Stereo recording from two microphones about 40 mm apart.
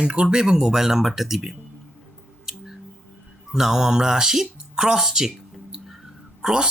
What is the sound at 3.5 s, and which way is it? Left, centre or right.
Speech, centre.